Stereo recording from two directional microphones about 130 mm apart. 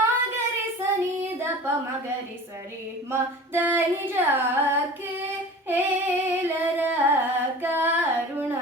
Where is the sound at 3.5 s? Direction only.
15° right (ahead or behind).